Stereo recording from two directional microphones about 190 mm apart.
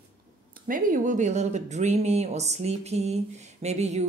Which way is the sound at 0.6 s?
45° right (ahead or behind).